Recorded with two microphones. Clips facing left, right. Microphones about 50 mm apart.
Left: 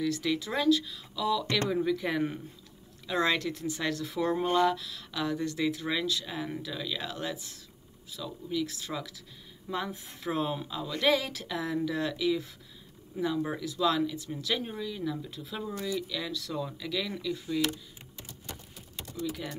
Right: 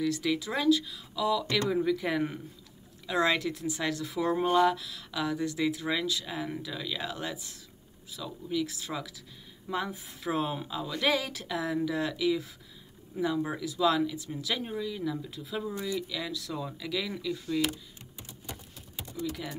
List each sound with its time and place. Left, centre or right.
0.0 s speech: centre
18.5 s a sound: centre
19.2 s speech: centre